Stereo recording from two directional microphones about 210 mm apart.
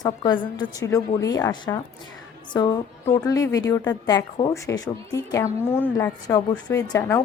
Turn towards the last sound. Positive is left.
turn(degrees=10)  # may be behind; listen again after turning